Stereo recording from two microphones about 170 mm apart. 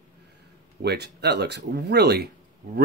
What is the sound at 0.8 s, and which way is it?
Speech, 80° right.